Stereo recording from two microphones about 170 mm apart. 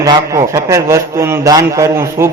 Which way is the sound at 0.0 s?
20° right (ahead or behind).